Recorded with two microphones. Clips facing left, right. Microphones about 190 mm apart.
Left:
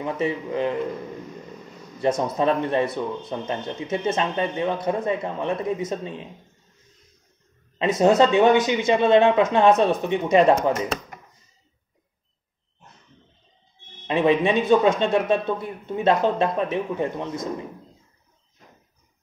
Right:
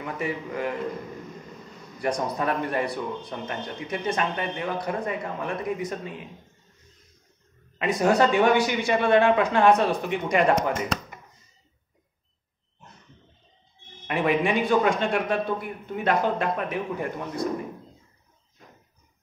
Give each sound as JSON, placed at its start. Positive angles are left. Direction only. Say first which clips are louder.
{"t": 0.0, "sound": "speech", "louder": "left 5 dB", "side_deg": 25}
{"t": 2.0, "sound": "speech", "louder": "left 5 dB", "side_deg": 25}
{"t": 7.8, "sound": "speech", "louder": "left 4 dB", "side_deg": 25}
{"t": 14.0, "sound": "speech", "louder": "left 4 dB", "side_deg": 25}